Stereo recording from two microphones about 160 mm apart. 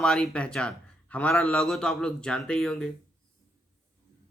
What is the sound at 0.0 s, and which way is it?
A man's voice, 5° left (ahead or behind).